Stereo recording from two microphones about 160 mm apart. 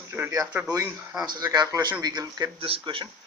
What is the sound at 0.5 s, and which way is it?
Speech, 15° right (ahead or behind).